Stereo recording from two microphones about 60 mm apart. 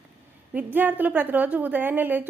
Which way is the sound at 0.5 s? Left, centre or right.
Right.